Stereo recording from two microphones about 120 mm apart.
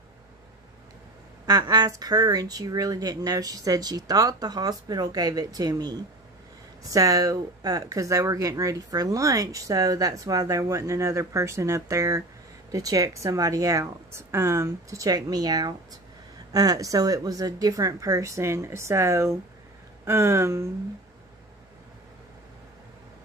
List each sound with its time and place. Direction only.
1.4 s speech: 30° right (ahead or behind)